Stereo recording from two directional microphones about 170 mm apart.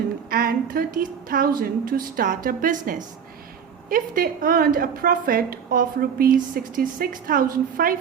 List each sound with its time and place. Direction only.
0.3 s a woman's voice: 60° right (ahead or behind)